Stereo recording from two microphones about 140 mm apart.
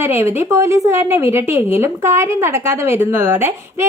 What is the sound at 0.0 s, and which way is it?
A woman's voice, 15° right (ahead or behind).